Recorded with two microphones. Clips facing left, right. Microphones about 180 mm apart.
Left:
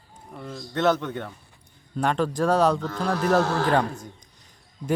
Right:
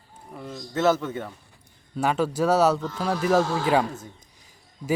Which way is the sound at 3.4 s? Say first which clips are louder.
Left 1 dB; 70° left (ahead or behind).